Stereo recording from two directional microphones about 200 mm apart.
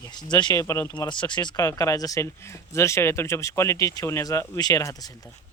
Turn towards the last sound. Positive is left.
turn(degrees=15)  # may be behind; listen again after turning